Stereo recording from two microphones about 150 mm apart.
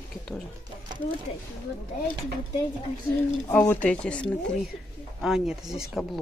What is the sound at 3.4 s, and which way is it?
Speech, 15° left (ahead or behind).